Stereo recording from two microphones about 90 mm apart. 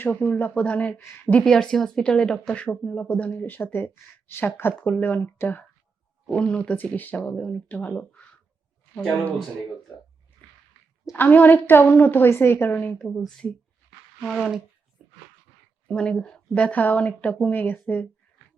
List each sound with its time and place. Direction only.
0.0 s speech: 15° left (ahead or behind)
6.2 s speech: 10° left (ahead or behind)
11.0 s speech: 25° left (ahead or behind)
13.0 s speech: 5° left (ahead or behind)
15.0 s a sound: 5° right (ahead or behind)
15.9 s speech: 10° left (ahead or behind)